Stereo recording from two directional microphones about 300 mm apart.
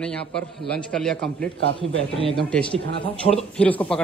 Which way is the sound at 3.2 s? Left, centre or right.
Centre.